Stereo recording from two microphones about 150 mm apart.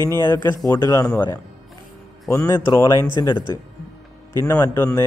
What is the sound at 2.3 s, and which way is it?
Speech, 15° left (ahead or behind).